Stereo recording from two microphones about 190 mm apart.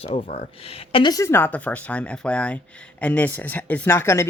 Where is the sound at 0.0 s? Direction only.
30° left (ahead or behind).